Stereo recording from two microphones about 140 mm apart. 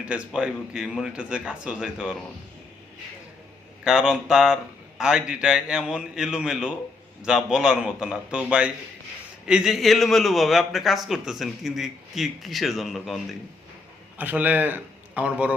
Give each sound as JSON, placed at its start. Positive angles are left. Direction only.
{"t": 0.0, "sound": "a man's voice", "side_deg": -5}
{"t": 3.8, "sound": "a man's voice", "side_deg": -5}
{"t": 14.2, "sound": "a man's voice", "side_deg": -10}